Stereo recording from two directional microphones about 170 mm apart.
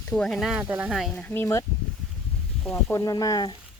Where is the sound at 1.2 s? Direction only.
15° left (ahead or behind).